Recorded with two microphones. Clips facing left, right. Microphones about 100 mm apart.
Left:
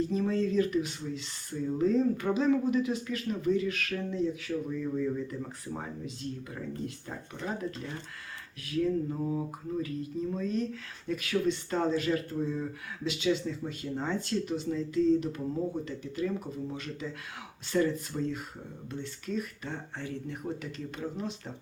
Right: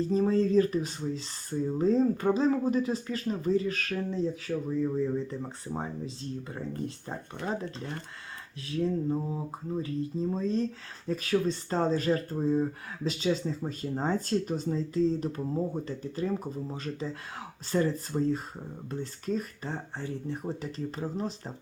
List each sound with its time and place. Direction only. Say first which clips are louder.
0.0 s speech: right 3 dB; 35° right (ahead or behind)
8.6 s a sound: even; 30° right (ahead or behind)
9.3 s speech: left 1 dB; 30° right (ahead or behind)